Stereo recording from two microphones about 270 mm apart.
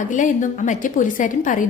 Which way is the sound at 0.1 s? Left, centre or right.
Left.